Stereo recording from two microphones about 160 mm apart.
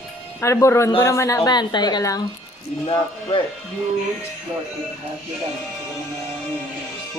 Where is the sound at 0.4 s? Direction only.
20° left (ahead or behind).